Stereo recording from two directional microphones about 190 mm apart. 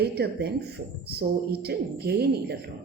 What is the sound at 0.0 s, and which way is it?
Speech, 60° right (ahead or behind).